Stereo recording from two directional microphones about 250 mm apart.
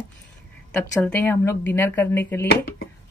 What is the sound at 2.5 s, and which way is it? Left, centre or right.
Speech, left.